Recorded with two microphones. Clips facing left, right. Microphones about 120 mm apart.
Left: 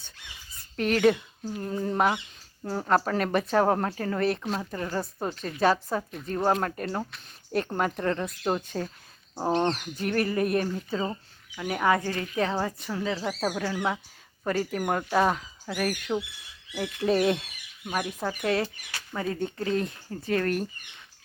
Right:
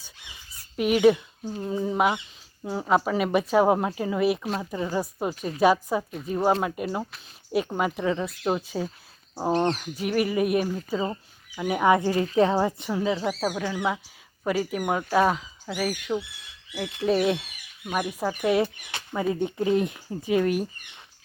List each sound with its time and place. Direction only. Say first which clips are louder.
0.8 s a woman's voice: right 3 dB; 10° right (ahead or behind)
13.2 s speech: right 2 dB; 5° right (ahead or behind)